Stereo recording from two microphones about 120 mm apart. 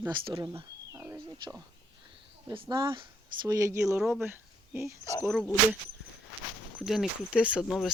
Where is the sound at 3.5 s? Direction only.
25° right (ahead or behind).